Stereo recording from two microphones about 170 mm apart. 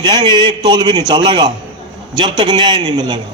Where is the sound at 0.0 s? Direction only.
25° right (ahead or behind).